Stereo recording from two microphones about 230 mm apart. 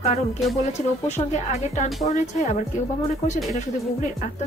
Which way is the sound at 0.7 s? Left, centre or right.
Left.